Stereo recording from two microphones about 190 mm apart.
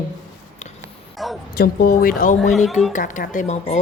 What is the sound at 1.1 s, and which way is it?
Speech, centre (ahead or behind).